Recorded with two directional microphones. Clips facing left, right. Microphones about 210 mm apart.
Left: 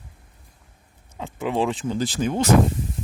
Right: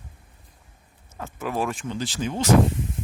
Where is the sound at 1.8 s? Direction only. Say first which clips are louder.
Left 5 dB; 45° left (ahead or behind).